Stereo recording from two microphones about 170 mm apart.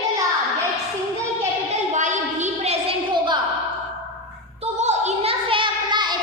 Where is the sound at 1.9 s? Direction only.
45° right (ahead or behind); by 3.4 s 25° right (ahead or behind).